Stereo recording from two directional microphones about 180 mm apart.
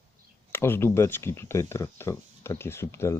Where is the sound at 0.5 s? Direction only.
15° left (ahead or behind).